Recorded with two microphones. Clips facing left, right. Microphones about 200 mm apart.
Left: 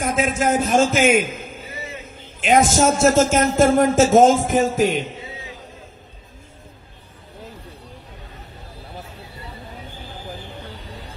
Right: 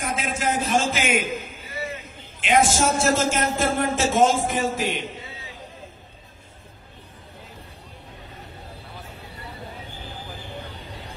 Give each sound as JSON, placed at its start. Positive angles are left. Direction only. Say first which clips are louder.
{"t": 0.0, "sound": "a man's voice", "louder": "left 6 dB", "side_deg": 45}